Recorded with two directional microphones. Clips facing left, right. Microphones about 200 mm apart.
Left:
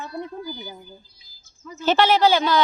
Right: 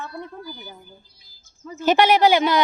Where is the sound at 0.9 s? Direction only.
55° right (ahead or behind).